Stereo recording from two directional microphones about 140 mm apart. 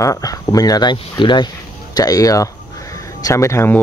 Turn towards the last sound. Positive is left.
turn(degrees=20)  # may be behind; listen again after turning